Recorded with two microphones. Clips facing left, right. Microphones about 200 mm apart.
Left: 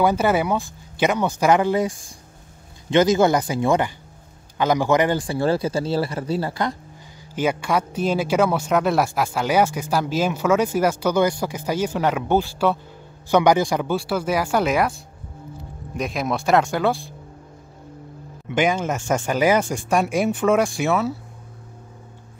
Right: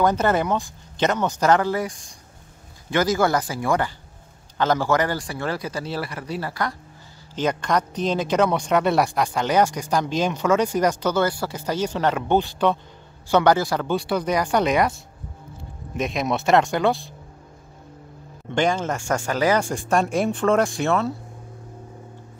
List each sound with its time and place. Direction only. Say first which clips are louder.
0.0 s speech: left 1 dB; 10° left (ahead or behind)
7.3 s speech: left 1 dB; 10° left (ahead or behind)
13.8 s speech: even; 5° left (ahead or behind)
18.5 s speech: left 1 dB; 5° left (ahead or behind)
18.9 s speech: left 2 dB; 20° left (ahead or behind)
20.1 s speech: left 1 dB; 5° left (ahead or behind)